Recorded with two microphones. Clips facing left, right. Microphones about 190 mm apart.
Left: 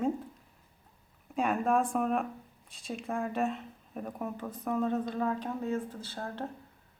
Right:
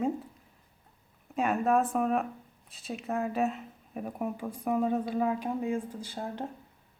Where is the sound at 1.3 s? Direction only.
Centre (ahead or behind).